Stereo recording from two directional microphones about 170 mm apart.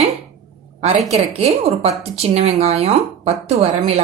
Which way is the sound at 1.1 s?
40° right (ahead or behind).